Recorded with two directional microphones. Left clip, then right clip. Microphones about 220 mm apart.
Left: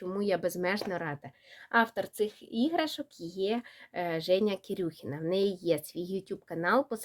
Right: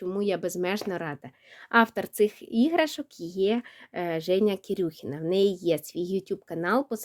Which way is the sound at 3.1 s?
90° right.